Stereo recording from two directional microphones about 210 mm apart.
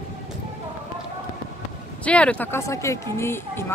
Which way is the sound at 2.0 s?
5° left (ahead or behind).